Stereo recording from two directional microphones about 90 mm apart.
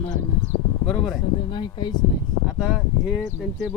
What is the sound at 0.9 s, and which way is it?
Speech, centre (ahead or behind).